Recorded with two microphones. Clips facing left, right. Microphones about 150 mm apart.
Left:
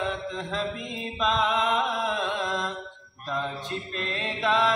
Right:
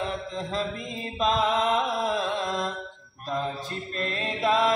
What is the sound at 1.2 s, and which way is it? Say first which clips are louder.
Music: right 1 dB; 35° right (ahead or behind).